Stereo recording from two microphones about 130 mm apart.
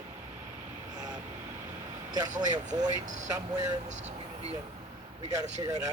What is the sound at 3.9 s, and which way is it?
Speech, 65° right (ahead or behind).